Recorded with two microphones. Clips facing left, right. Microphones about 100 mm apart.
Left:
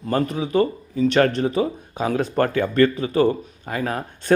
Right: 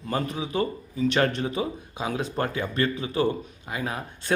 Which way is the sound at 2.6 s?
40° left (ahead or behind).